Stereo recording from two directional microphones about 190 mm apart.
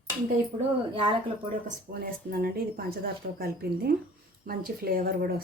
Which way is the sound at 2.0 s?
50° right (ahead or behind).